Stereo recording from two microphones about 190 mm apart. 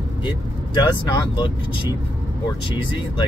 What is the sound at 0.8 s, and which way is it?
Speech, 25° left (ahead or behind).